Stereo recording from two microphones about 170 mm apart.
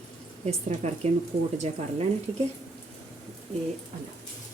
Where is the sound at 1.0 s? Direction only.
40° right (ahead or behind).